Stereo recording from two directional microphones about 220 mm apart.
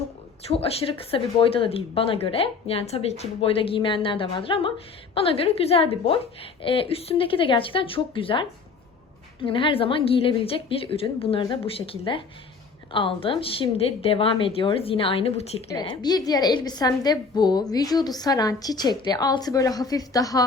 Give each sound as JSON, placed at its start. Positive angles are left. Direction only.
{"t": 0.4, "sound": "a woman's voice", "side_deg": 25}